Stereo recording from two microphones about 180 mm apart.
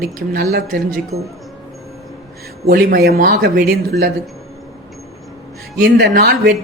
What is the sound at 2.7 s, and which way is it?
Speech, 60° right (ahead or behind).